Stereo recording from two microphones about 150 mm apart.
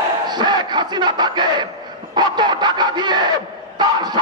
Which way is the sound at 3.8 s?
30° right (ahead or behind).